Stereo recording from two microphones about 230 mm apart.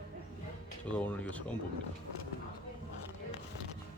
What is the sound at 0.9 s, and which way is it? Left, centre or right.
Speech, centre.